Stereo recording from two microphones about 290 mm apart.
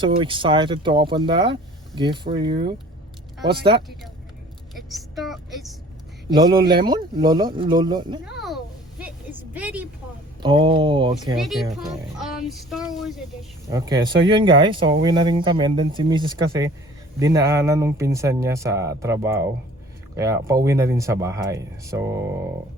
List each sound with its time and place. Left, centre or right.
0.0 s speech: centre
4.7 s a woman's voice: centre
6.3 s speech: centre
9.5 s child singing: centre
10.4 s speech: centre
11.3 s child singing: centre
13.7 s speech: centre